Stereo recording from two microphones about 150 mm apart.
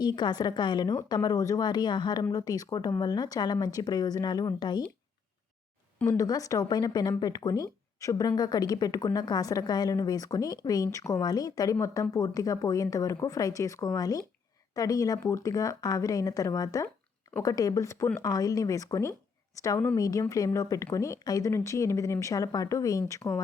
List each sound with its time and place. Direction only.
0.0 s speech: 30° left (ahead or behind)
6.1 s speech: 25° left (ahead or behind)